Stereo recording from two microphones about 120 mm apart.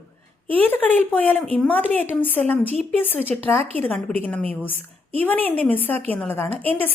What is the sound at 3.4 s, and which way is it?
Speech, 15° left (ahead or behind).